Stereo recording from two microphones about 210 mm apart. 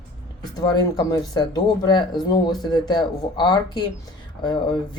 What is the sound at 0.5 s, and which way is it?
Speech, 20° left (ahead or behind).